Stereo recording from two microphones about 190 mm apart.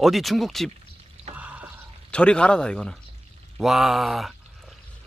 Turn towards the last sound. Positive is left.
turn(degrees=0)  # may be behind; listen again after turning